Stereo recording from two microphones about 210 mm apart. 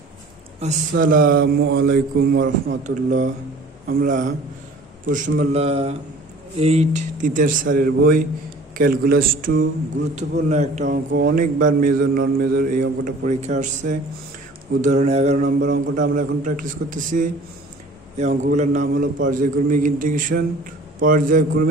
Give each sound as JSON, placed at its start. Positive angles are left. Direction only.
{"t": 0.6, "sound": "a man's voice", "side_deg": -35}
{"t": 10.5, "sound": "a man's voice", "side_deg": -35}
{"t": 11.1, "sound": "a man's voice", "side_deg": -50}